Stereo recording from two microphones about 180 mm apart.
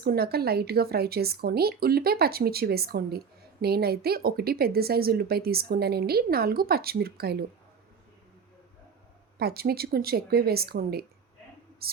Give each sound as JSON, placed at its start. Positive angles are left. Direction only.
{"t": 0.0, "sound": "a woman's voice", "side_deg": -60}
{"t": 9.4, "sound": "a woman's voice", "side_deg": -60}